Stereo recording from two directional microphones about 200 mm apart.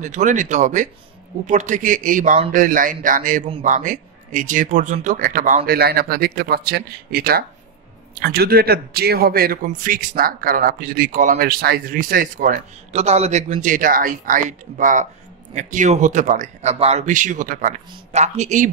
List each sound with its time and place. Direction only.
0.0 s speech: 35° right (ahead or behind)
3.4 s speech: 30° right (ahead or behind)
3.7 s a man's voice: 40° right (ahead or behind)